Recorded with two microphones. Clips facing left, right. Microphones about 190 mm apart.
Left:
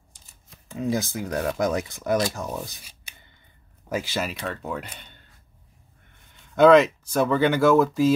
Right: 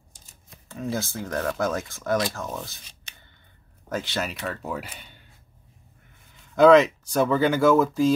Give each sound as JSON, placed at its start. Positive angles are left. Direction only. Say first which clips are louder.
{"t": 0.7, "sound": "speech", "louder": "left 3 dB", "side_deg": 15}
{"t": 6.3, "sound": "speech", "louder": "even", "side_deg": 0}